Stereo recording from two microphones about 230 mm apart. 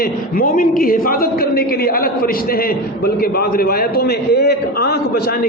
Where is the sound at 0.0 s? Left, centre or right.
Left.